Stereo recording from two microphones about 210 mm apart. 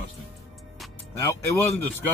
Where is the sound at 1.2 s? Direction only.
15° left (ahead or behind).